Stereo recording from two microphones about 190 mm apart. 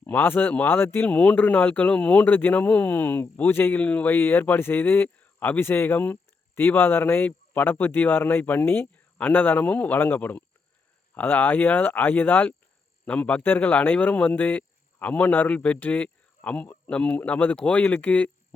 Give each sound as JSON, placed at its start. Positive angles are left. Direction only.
{"t": 0.0, "sound": "speech", "side_deg": 10}